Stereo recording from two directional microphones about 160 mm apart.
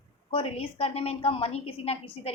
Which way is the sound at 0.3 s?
35° left (ahead or behind).